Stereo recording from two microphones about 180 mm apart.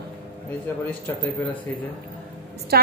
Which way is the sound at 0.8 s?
10° left (ahead or behind).